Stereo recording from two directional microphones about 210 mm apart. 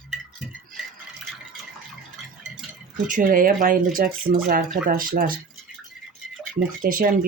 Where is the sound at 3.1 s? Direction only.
40° right (ahead or behind).